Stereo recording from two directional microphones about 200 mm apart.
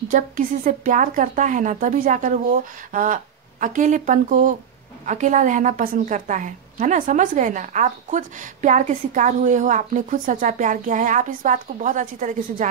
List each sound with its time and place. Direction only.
0.1 s a woman's voice: 40° right (ahead or behind)